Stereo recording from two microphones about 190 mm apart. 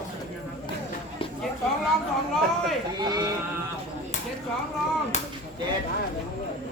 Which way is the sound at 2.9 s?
20° right (ahead or behind).